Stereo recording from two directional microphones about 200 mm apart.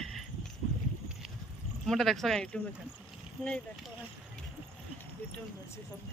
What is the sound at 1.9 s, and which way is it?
Speech, centre (ahead or behind).